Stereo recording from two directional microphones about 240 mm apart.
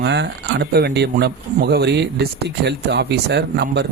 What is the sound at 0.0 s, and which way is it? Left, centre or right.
Speech, right.